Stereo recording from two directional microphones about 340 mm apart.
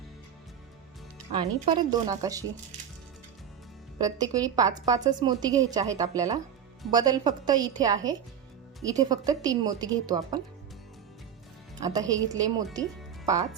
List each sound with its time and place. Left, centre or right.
1.3 s a woman's voice: centre
3.9 s a woman's voice: centre
11.8 s a woman's voice: centre